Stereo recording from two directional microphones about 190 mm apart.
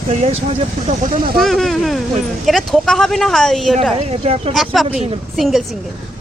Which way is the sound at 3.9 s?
35° right (ahead or behind).